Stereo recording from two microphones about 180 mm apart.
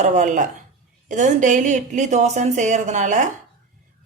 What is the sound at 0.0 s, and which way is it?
Speech, 40° right (ahead or behind).